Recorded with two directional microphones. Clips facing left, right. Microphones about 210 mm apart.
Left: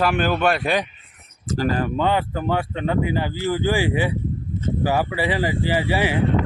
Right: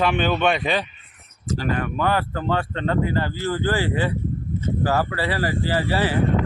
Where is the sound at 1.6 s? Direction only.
35° left (ahead or behind).